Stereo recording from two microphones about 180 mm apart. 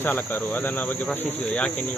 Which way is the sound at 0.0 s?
10° left (ahead or behind).